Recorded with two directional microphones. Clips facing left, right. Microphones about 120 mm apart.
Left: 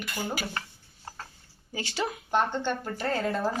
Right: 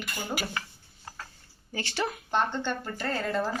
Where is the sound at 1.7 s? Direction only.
15° left (ahead or behind).